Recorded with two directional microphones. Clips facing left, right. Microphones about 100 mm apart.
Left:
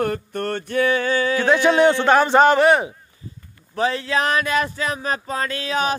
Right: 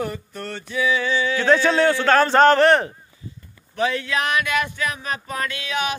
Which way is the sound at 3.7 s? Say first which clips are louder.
Left 2 dB; 30° left (ahead or behind).